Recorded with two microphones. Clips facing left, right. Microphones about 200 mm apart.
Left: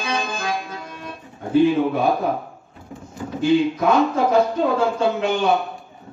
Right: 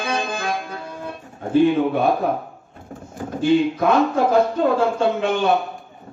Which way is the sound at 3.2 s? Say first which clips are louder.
Right 1 dB; 45° right (ahead or behind).